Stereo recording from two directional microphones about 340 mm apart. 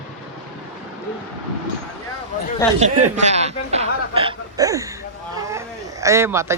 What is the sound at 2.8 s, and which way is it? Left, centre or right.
Speech, centre.